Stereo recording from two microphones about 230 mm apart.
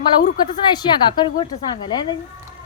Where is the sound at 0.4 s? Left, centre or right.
Centre.